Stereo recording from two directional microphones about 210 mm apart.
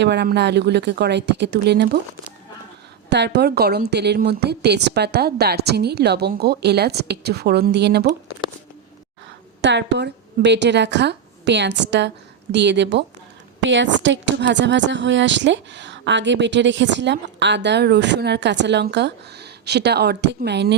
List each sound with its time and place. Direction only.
0.0 s a woman's voice: 55° right (ahead or behind)
3.1 s a woman's voice: 55° right (ahead or behind)
9.6 s a woman's voice: 55° right (ahead or behind)